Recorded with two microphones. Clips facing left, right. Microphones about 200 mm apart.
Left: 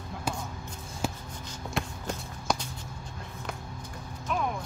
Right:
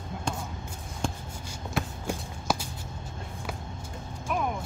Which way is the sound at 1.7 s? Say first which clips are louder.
Right 2 dB; 5° right (ahead or behind).